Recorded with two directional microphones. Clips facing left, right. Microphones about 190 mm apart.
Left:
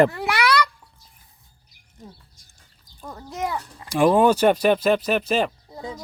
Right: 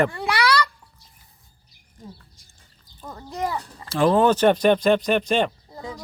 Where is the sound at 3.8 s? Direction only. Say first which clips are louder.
Left 1 dB; 15° left (ahead or behind).